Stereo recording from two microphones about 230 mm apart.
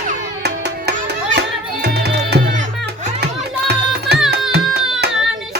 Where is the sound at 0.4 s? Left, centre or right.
Right.